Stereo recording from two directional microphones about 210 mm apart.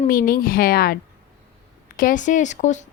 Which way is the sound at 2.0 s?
40° left (ahead or behind).